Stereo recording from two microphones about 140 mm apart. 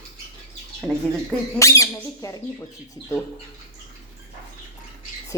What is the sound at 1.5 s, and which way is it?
Speech, 20° left (ahead or behind).